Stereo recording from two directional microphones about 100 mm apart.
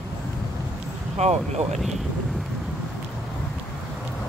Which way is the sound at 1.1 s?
90° right.